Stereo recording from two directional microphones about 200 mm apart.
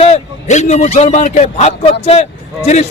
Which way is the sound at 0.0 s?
35° left (ahead or behind).